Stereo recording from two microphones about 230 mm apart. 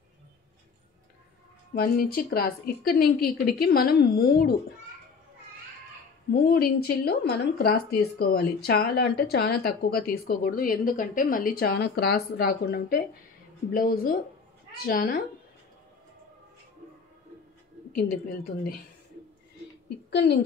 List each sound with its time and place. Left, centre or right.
1.8 s speech: left
6.5 s speech: left
17.9 s speech: left
20.1 s speech: left